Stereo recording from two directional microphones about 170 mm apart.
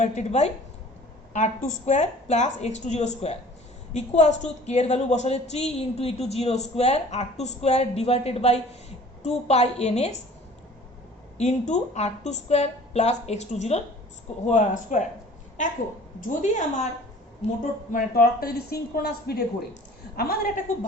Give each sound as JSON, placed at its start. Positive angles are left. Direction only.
{"t": 0.0, "sound": "speech", "side_deg": 45}
{"t": 11.3, "sound": "speech", "side_deg": 45}
{"t": 16.4, "sound": "speech", "side_deg": 45}
{"t": 17.9, "sound": "speech", "side_deg": 60}